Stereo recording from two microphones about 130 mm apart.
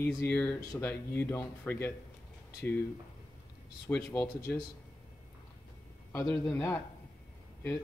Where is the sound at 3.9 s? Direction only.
15° left (ahead or behind).